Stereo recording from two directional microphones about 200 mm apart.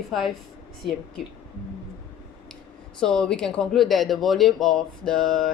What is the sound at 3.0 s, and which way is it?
Speech, 5° left (ahead or behind).